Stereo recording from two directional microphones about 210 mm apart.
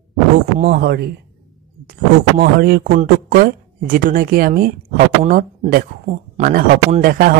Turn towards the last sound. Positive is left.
turn(degrees=-45)  # may be behind; listen again after turning